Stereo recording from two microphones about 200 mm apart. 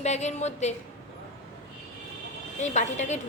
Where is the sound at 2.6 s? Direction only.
35° left (ahead or behind).